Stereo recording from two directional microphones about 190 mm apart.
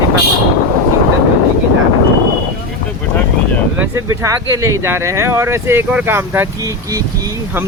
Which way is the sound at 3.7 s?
15° right (ahead or behind).